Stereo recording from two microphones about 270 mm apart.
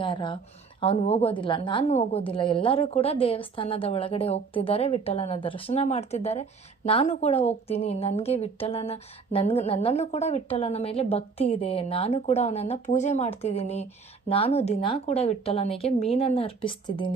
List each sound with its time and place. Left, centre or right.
0.0 s a woman's voice: centre